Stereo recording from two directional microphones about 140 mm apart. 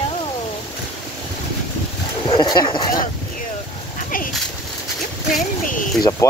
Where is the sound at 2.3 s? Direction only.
30° left (ahead or behind).